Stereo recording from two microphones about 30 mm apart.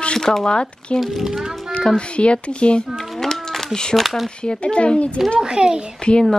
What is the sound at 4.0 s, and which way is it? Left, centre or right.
Speech, centre.